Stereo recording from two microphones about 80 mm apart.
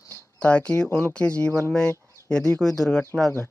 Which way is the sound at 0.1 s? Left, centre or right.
Left.